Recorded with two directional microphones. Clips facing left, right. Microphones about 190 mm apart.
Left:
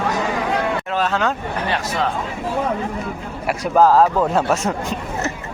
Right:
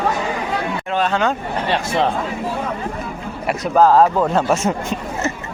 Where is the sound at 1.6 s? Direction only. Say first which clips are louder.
Right 4 dB; 30° right (ahead or behind).